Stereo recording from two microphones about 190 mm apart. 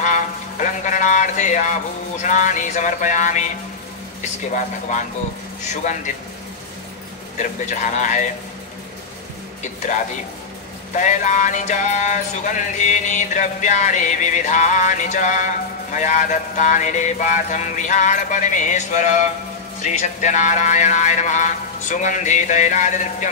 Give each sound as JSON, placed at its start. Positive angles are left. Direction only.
{"t": 0.0, "sound": "a sound", "side_deg": 40}
{"t": 2.2, "sound": "music", "side_deg": 40}
{"t": 7.3, "sound": "music", "side_deg": 40}
{"t": 11.0, "sound": "music", "side_deg": 40}